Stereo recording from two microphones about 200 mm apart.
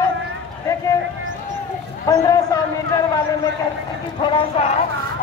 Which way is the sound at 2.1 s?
15° left (ahead or behind).